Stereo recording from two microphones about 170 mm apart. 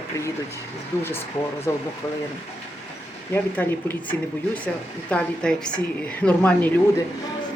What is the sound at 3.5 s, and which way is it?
A woman's voice, 10° left (ahead or behind).